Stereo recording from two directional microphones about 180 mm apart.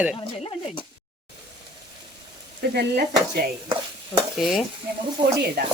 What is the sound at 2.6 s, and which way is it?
Speech, 60° right (ahead or behind).